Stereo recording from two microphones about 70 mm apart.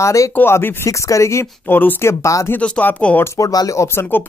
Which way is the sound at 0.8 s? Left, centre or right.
Left.